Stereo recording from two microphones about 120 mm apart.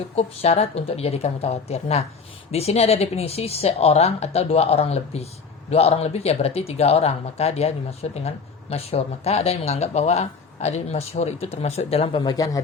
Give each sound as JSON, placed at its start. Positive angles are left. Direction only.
{"t": 0.2, "sound": "speech", "side_deg": 60}